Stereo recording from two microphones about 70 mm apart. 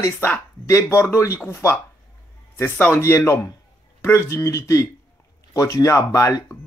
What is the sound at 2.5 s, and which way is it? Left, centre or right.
Speech, left.